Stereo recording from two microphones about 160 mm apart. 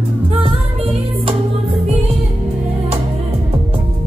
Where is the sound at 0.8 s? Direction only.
35° right (ahead or behind).